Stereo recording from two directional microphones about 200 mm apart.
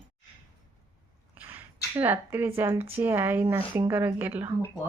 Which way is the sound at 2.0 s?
10° right (ahead or behind).